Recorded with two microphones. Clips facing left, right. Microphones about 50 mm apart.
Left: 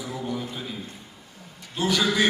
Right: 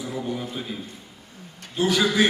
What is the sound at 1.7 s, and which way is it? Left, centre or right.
Speech, centre.